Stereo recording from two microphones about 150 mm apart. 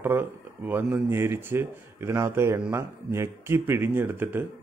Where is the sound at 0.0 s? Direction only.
15° right (ahead or behind).